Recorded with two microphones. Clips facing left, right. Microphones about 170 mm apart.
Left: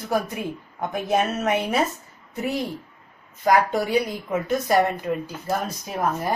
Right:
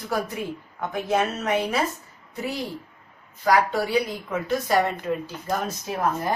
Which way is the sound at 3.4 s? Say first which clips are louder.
Left 1 dB; 20° left (ahead or behind).